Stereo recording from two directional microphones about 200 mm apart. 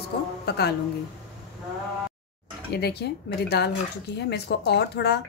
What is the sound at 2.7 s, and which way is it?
A woman's voice, 55° left (ahead or behind).